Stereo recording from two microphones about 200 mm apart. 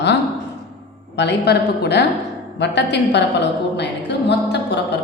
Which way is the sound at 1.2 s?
60° left (ahead or behind).